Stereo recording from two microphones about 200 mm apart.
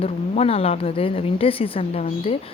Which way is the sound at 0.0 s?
30° left (ahead or behind).